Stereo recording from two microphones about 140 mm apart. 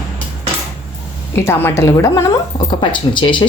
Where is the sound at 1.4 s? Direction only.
15° left (ahead or behind).